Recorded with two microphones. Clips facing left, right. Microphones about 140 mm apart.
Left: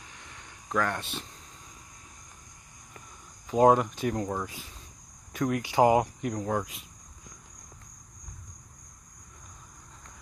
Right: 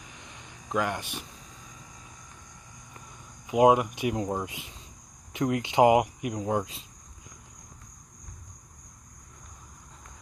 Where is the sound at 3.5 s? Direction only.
10° right (ahead or behind).